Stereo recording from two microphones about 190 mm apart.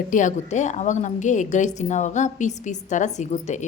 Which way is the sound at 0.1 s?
40° left (ahead or behind).